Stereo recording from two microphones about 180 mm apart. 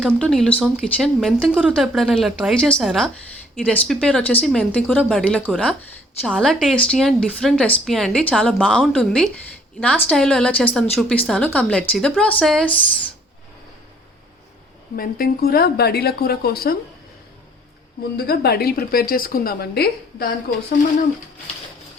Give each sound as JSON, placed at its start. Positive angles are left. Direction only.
{"t": 0.0, "sound": "speech", "side_deg": 5}
{"t": 14.9, "sound": "a woman's voice", "side_deg": 55}
{"t": 18.2, "sound": "a woman's voice", "side_deg": 60}